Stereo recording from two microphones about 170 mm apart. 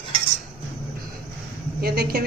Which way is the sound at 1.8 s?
65° right (ahead or behind).